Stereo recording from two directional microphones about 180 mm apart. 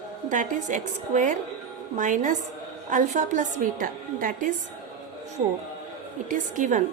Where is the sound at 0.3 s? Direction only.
45° right (ahead or behind).